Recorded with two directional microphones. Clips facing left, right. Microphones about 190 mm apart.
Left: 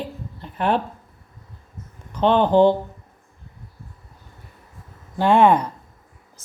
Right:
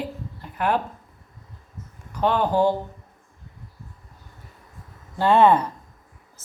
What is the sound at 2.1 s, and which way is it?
Speech, 25° left (ahead or behind).